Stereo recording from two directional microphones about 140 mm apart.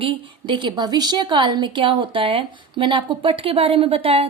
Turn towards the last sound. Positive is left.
turn(degrees=-45)  # may be behind; listen again after turning